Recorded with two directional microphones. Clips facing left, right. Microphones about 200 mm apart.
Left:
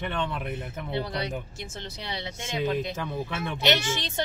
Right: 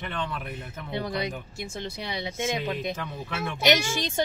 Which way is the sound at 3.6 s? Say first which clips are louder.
Right 3 dB; 10° right (ahead or behind).